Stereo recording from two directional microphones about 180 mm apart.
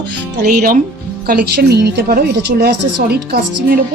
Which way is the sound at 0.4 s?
55° right (ahead or behind).